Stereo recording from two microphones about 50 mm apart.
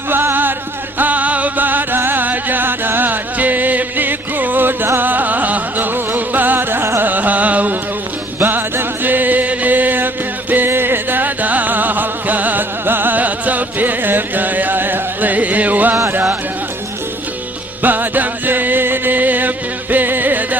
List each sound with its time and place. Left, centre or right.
0.1 s music: right
0.9 s music: right
7.0 s music: right
8.4 s music: right
17.8 s music: right